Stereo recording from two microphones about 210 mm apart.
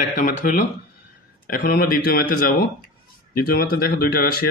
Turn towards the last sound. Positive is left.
turn(degrees=45)  # may be behind; listen again after turning